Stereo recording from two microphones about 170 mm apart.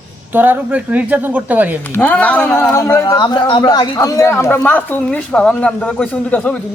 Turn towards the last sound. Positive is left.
turn(degrees=5)  # may be behind; listen again after turning